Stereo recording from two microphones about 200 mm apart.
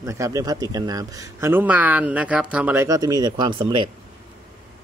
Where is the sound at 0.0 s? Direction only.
15° right (ahead or behind).